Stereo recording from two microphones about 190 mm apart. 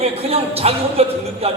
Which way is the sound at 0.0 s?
30° right (ahead or behind).